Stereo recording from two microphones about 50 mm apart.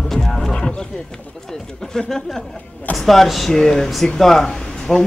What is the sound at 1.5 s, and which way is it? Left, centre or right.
Speech, centre.